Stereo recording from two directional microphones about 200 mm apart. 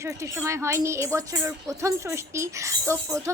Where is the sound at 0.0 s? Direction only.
15° right (ahead or behind).